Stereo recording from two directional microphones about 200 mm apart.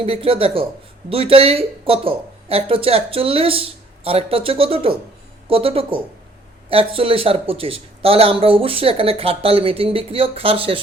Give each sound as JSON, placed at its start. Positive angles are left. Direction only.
{"t": 0.0, "sound": "speech", "side_deg": -25}